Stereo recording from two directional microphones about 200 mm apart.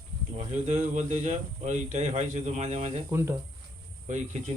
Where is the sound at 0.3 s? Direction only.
30° right (ahead or behind).